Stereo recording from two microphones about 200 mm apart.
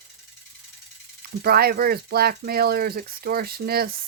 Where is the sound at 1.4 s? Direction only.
50° right (ahead or behind).